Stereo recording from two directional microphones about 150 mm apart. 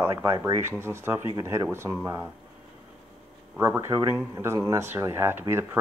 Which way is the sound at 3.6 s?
15° right (ahead or behind).